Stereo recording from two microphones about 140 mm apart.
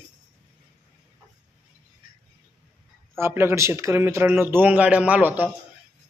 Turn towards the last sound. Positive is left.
turn(degrees=-10)  # may be behind; listen again after turning